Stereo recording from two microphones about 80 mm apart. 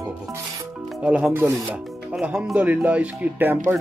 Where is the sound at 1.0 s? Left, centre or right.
Centre.